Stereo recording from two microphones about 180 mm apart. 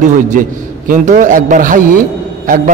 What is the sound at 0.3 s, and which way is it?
A man's voice, 45° right (ahead or behind).